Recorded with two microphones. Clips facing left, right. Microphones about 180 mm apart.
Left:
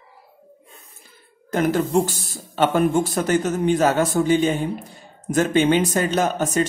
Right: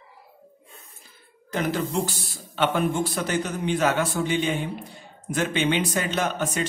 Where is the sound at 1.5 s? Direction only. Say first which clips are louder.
Left 7 dB; 50° left (ahead or behind).